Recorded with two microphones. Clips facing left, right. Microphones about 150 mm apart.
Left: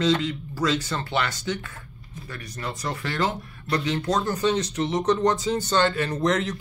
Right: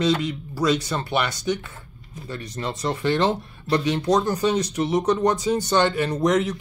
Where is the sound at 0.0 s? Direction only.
15° right (ahead or behind).